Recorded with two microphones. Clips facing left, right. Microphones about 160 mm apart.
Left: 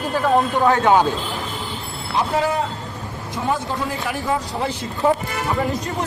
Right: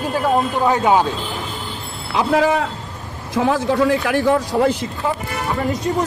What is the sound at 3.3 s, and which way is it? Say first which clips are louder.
A man's voice: right 6 dB; 90° right.